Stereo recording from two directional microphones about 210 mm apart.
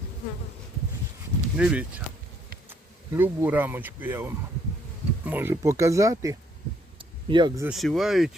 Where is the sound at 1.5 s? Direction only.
5° right (ahead or behind).